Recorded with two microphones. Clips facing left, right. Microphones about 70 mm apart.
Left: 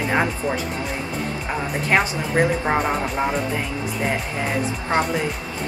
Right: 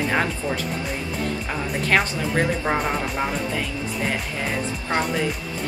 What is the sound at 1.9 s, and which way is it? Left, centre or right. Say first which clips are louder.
Speech: left 1 dB; centre.